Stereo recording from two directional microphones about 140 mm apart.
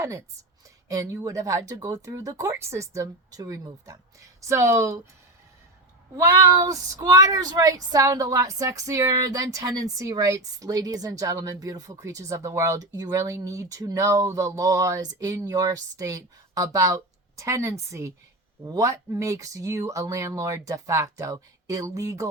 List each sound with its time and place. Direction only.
0.9 s speech: 25° right (ahead or behind)
6.1 s speech: 20° right (ahead or behind)